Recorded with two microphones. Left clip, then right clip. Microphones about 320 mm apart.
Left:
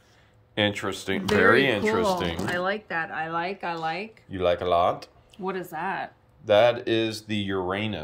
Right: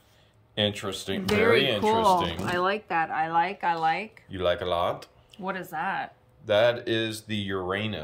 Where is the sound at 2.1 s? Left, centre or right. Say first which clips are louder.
Right 2 dB; right.